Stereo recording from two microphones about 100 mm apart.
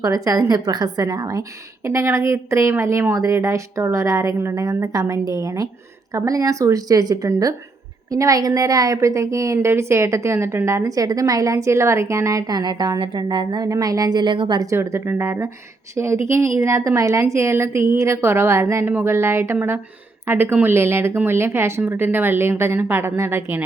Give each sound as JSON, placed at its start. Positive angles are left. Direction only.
{"t": 0.0, "sound": "a woman's voice", "side_deg": -35}
{"t": 14.7, "sound": "a woman's voice", "side_deg": -25}